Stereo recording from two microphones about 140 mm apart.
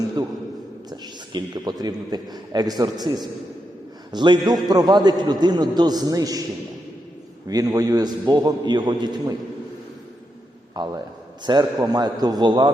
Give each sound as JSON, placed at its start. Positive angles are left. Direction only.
{"t": 0.9, "sound": "a man's voice", "side_deg": -30}
{"t": 7.4, "sound": "a man's voice", "side_deg": -25}
{"t": 10.8, "sound": "a man's voice", "side_deg": -30}